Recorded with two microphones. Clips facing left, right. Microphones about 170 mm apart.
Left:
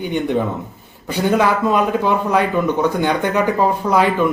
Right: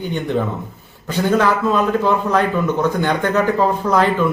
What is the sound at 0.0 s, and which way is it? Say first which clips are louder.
Speech: left 2 dB; 15° left (ahead or behind).